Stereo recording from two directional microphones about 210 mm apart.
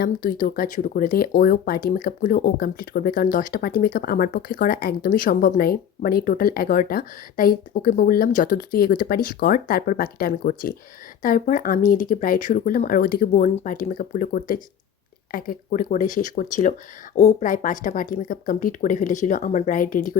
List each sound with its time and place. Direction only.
0.0 s speech: 40° left (ahead or behind)